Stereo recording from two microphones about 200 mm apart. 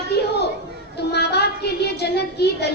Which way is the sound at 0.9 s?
55° left (ahead or behind).